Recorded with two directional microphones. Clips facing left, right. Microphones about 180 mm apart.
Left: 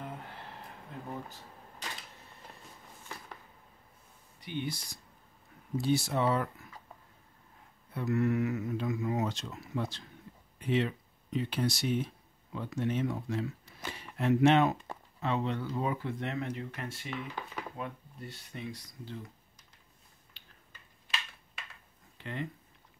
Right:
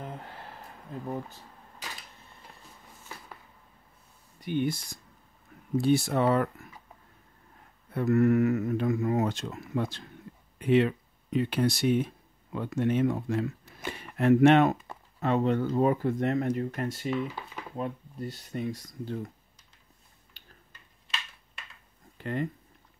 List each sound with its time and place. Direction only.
4.4 s speech: 50° right (ahead or behind)
7.9 s speech: 55° right (ahead or behind)
20.4 s tick-tock: 40° right (ahead or behind)
22.2 s speech: 45° right (ahead or behind)